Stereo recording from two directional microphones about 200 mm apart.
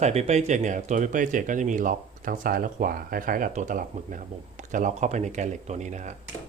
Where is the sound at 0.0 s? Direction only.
35° right (ahead or behind).